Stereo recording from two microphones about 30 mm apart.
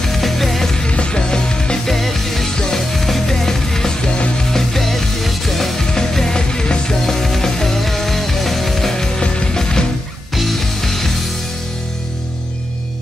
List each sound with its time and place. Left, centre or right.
0.0 s music: centre
0.8 s music: left
1.9 s music: centre
2.4 s music: left
2.9 s music: centre
5.8 s music: centre
7.1 s music: centre
8.9 s music: left
9.2 s music: left
10.3 s music: centre